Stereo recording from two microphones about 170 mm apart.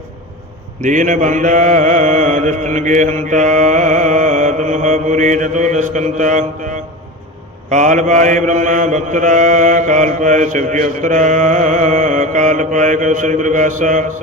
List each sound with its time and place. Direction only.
0.8 s mantra: 50° right (ahead or behind)
7.7 s mantra: 45° right (ahead or behind)